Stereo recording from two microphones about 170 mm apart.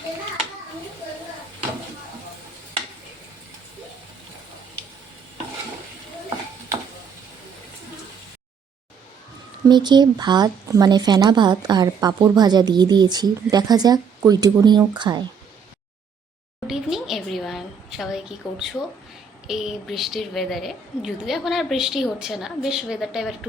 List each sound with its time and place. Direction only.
9.6 s speech: 25° right (ahead or behind)
16.6 s a sound: centre (ahead or behind)
19.5 s a woman's voice: centre (ahead or behind)